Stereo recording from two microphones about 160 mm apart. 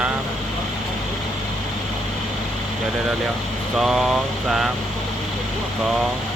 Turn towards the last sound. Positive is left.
turn(degrees=0)  # may be behind; listen again after turning